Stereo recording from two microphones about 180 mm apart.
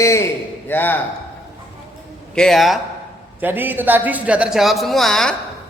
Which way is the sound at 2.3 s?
5° left (ahead or behind).